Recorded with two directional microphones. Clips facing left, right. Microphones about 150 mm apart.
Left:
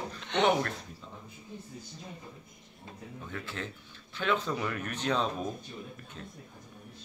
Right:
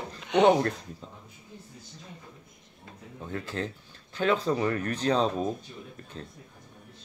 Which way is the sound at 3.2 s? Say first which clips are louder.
Right 7 dB; 40° right (ahead or behind).